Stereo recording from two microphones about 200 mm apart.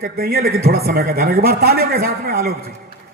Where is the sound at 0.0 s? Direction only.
50° right (ahead or behind).